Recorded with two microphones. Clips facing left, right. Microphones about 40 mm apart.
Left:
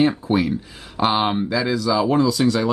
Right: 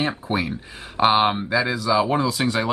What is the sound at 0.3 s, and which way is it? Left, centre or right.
Speech, centre.